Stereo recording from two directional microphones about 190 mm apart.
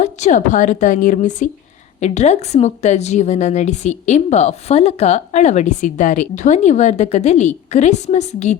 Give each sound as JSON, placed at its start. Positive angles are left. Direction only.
{"t": 0.0, "sound": "a woman's voice", "side_deg": 40}